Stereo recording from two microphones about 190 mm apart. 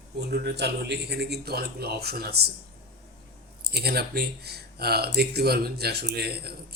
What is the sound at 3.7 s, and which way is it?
Speech, 55° right (ahead or behind).